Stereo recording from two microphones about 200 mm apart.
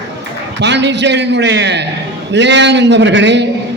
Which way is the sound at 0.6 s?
60° right (ahead or behind).